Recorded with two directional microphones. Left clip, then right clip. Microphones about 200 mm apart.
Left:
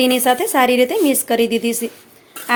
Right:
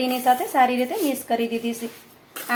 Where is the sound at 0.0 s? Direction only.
50° left (ahead or behind).